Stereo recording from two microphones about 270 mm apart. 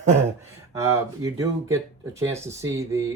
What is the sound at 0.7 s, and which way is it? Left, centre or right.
Speech, centre.